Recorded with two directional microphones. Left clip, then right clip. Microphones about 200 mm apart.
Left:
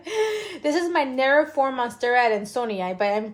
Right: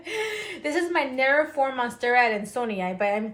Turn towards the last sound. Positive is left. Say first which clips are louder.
# left 2 dB
turn(degrees=55)  # may be behind; listen again after turning